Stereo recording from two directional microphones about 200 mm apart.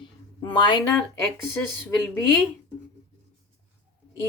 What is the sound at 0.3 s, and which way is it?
Speech, 25° left (ahead or behind).